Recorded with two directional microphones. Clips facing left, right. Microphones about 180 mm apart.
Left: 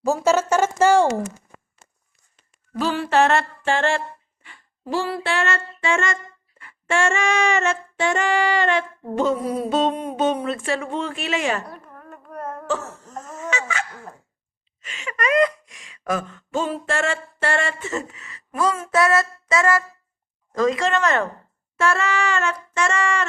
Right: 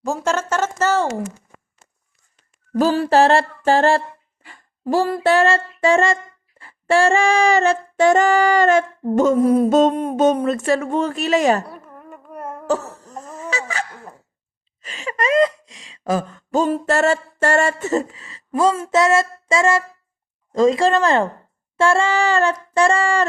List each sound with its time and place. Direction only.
0.0 s a sound: 5° left (ahead or behind)
2.7 s child singing: 40° right (ahead or behind)
6.6 s female singing: 35° right (ahead or behind)
11.7 s carnatic music: 5° right (ahead or behind)
12.6 s cough: 40° right (ahead or behind)
13.2 s fowl: 35° right (ahead or behind)
14.8 s speech: 35° right (ahead or behind)
21.8 s child singing: 30° right (ahead or behind)